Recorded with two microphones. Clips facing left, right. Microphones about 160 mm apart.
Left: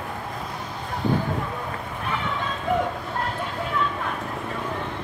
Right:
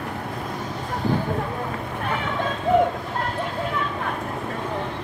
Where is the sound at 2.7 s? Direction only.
65° right (ahead or behind).